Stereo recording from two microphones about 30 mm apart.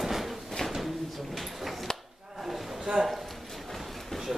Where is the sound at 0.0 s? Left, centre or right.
Centre.